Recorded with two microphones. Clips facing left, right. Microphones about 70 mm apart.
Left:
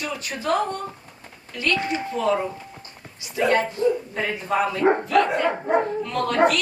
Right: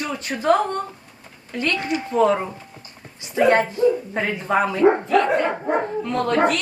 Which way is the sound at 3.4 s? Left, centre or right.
Right.